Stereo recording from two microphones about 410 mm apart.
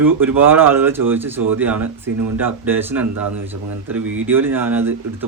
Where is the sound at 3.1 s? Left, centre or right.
Right.